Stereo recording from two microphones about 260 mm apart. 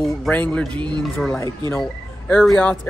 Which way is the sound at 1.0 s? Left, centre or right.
Centre.